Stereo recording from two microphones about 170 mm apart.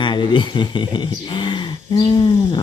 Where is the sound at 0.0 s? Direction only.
25° left (ahead or behind).